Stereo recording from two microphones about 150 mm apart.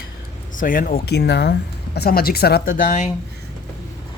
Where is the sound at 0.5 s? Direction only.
65° left (ahead or behind).